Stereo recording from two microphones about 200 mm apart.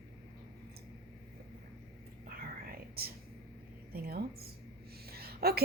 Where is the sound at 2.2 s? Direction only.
50° right (ahead or behind).